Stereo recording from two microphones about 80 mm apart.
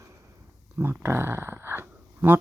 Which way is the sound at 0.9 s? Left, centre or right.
Right.